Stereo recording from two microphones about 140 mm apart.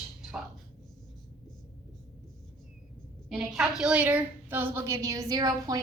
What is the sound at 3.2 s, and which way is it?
A woman's voice, 5° right (ahead or behind).